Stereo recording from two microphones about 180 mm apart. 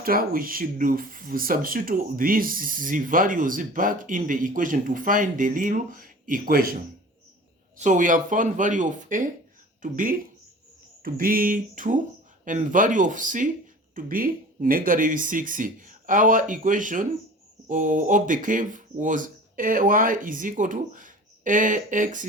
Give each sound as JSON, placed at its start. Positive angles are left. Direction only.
{"t": 0.0, "sound": "speech", "side_deg": -55}
{"t": 7.8, "sound": "speech", "side_deg": -45}